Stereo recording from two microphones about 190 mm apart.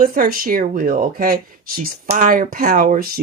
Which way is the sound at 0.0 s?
50° right (ahead or behind).